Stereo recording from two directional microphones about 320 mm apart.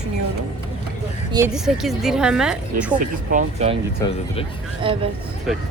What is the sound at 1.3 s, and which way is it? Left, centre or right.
Speech, centre.